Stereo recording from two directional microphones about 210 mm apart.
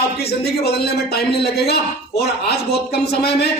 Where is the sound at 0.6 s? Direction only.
50° left (ahead or behind).